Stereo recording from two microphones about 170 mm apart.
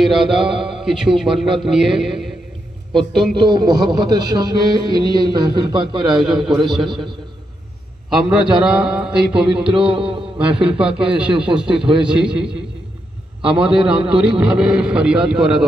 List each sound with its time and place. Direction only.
0.0 s speech: centre (ahead or behind)
3.3 s a man's voice: 25° right (ahead or behind)
6.7 s speech: centre (ahead or behind)
8.2 s speech: 5° right (ahead or behind)
9.9 s a man's voice: 30° right (ahead or behind)
10.3 s a man's voice: 5° right (ahead or behind)